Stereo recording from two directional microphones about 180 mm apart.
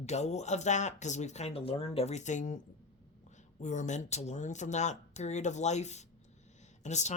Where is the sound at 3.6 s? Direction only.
40° left (ahead or behind).